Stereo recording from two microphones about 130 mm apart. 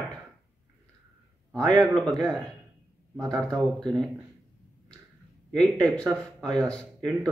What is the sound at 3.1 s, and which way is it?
Speech, 25° right (ahead or behind).